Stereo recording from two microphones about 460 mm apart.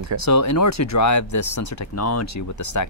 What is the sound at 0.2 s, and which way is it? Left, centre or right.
Speech, left.